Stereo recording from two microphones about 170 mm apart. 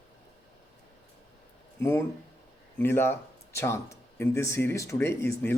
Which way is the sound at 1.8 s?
15° left (ahead or behind).